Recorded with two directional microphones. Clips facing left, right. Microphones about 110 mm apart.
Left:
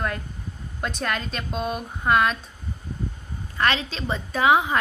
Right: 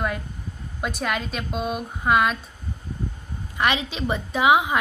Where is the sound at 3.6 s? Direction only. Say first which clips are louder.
Right 1 dB; 15° right (ahead or behind).